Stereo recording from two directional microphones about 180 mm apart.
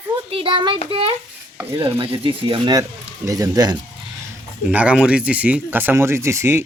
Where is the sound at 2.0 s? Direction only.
30° right (ahead or behind).